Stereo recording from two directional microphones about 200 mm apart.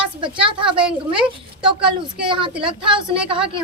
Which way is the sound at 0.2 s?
25° right (ahead or behind).